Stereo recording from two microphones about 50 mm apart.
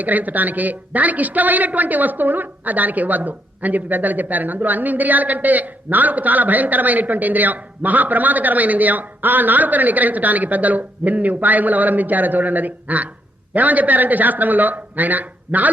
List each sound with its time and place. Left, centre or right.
0.0 s a woman's voice: right